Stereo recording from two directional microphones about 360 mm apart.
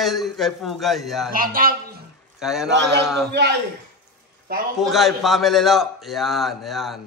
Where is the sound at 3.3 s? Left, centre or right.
Right.